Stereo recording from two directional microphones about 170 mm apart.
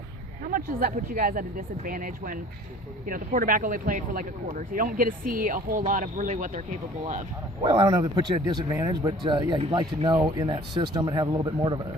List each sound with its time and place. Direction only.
0.4 s speech: 55° right (ahead or behind)
7.6 s a man's voice: 25° right (ahead or behind)